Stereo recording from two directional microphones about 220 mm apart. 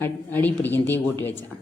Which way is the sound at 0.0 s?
10° left (ahead or behind).